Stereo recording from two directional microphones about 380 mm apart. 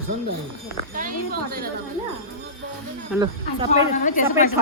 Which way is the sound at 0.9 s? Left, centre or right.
Right.